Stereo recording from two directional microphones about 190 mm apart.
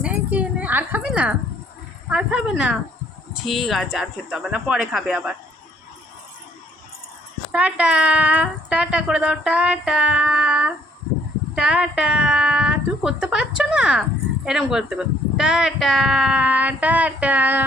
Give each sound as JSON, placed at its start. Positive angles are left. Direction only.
{"t": 0.0, "sound": "a sound", "side_deg": -5}
{"t": 2.0, "sound": "speech", "side_deg": -5}
{"t": 7.5, "sound": "speech", "side_deg": -5}